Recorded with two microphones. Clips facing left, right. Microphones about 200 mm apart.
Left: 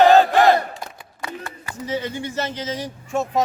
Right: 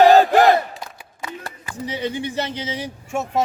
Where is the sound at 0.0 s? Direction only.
Centre (ahead or behind).